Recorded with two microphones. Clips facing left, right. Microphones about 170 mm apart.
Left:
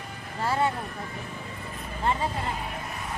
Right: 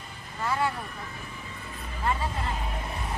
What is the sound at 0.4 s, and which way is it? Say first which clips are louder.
Speech: left 2 dB; 30° left (ahead or behind).